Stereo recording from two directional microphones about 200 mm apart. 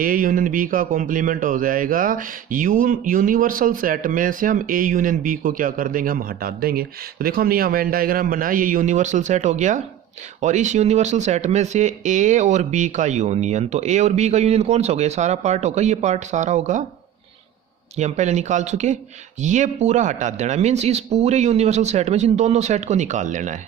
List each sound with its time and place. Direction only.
0.0 s speech: 45° right (ahead or behind)
17.9 s speech: 35° right (ahead or behind)